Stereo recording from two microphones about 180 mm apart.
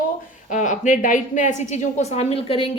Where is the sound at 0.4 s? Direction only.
45° left (ahead or behind).